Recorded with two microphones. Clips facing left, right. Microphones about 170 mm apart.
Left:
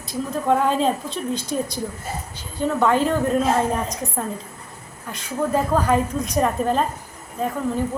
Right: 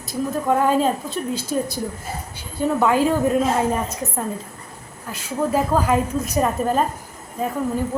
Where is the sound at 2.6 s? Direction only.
5° right (ahead or behind).